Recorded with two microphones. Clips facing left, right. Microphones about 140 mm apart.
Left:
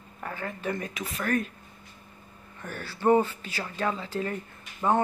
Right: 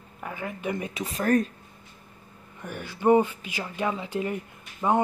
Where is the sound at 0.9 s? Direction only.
35° right (ahead or behind).